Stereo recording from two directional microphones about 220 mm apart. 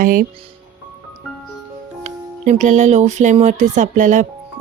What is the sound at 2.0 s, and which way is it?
Speech, 35° right (ahead or behind).